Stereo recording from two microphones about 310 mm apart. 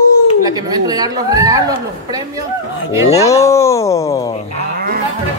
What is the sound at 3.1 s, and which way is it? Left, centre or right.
A man's voice, centre.